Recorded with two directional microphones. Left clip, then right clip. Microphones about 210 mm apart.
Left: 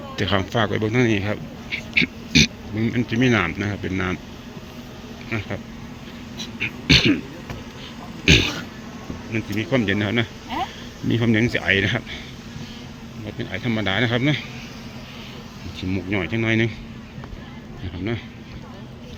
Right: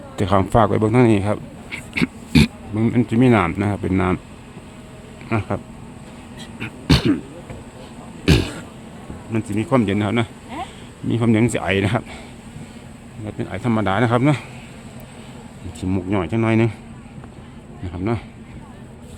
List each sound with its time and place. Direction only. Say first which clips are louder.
0.2 s a man's voice: right 5 dB; 20° right (ahead or behind)
6.6 s a sound: left 4 dB; 25° right (ahead or behind)
8.2 s throat clearing: left 3 dB; 25° right (ahead or behind)
9.3 s a man's voice: right 3 dB; 25° right (ahead or behind)
13.4 s a man's voice: right 3 dB; 25° right (ahead or behind)
15.8 s a man's voice: right 3 dB; 25° right (ahead or behind)